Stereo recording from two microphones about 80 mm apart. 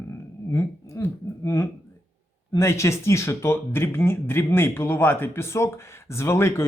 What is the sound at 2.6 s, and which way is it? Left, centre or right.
Speech, left.